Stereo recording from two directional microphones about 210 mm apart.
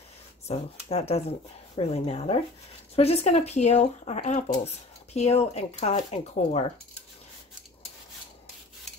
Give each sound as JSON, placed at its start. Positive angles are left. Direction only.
{"t": 0.5, "sound": "speech", "side_deg": 30}